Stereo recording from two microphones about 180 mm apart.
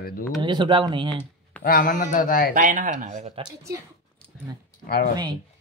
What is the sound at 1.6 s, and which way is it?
Speech, 55° left (ahead or behind).